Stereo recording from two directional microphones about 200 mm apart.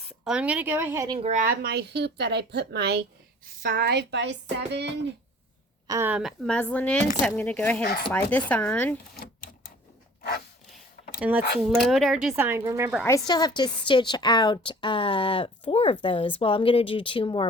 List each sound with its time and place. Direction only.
0.1 s speech: 5° right (ahead or behind)
1.2 s speech: 35° right (ahead or behind); by 3.0 s 55° right (ahead or behind)
3.4 s speech: 45° right (ahead or behind); by 4.9 s 60° right (ahead or behind)
5.9 s a woman's voice: 10° right (ahead or behind); by 9.0 s 5° left (ahead or behind)
11.2 s speech: 10° right (ahead or behind)
13.0 s a woman's voice: 15° left (ahead or behind)